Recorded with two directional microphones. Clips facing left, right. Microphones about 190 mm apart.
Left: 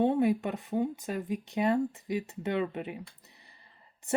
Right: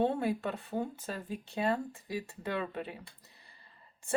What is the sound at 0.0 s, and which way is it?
Speech, 15° left (ahead or behind).